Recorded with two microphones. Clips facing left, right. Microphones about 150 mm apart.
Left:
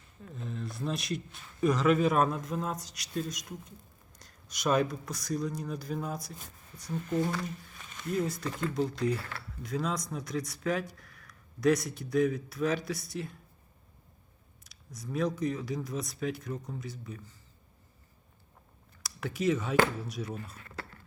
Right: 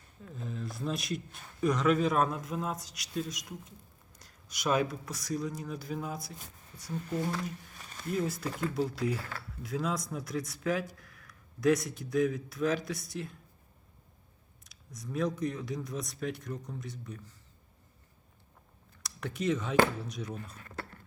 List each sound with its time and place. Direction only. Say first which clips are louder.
0.3 s a man's voice: even; centre (ahead or behind)
14.6 s a man's voice: left 1 dB; centre (ahead or behind)
19.0 s a man's voice: left 2 dB; 5° left (ahead or behind)
20.6 s a sound: right 1 dB; 40° right (ahead or behind)